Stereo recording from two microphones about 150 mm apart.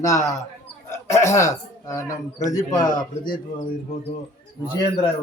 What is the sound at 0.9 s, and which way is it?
Speech, 20° left (ahead or behind).